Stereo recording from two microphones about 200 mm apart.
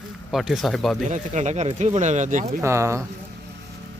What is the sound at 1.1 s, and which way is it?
Speech, 35° right (ahead or behind).